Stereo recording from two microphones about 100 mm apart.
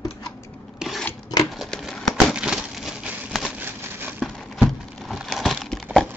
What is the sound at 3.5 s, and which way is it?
Crumpling, 20° right (ahead or behind).